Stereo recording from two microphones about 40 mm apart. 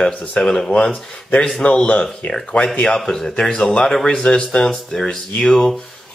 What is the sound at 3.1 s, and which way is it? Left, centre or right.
Speech, centre.